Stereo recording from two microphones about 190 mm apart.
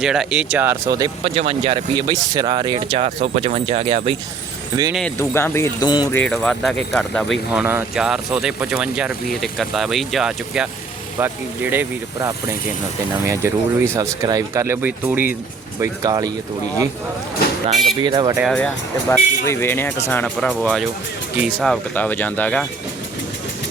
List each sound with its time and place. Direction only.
0.0 s speech: 5° right (ahead or behind); by 4.1 s 30° right (ahead or behind)
5.1 s speech: 15° left (ahead or behind)
6.1 s speech: 5° left (ahead or behind)
7.5 s speech: 10° right (ahead or behind)
18.0 s speech: 25° right (ahead or behind)
18.5 s speech: 5° left (ahead or behind)